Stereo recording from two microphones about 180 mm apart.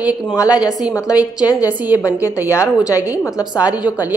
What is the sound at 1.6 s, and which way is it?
Speech, 10° right (ahead or behind).